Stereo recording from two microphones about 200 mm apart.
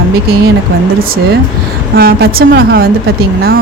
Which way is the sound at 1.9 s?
50° right (ahead or behind).